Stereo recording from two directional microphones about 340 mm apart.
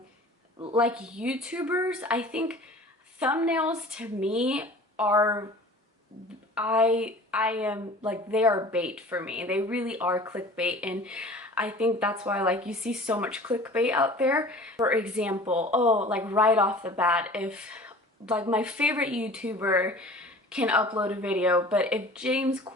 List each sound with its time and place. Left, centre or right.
0.8 s a woman's voice: centre
6.5 s a woman's voice: centre
15.4 s speech: centre
16.0 s a woman's voice: centre